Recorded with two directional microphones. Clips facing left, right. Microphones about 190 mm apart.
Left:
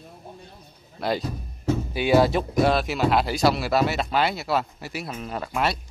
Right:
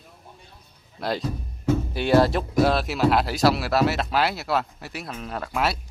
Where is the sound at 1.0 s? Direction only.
Centre (ahead or behind).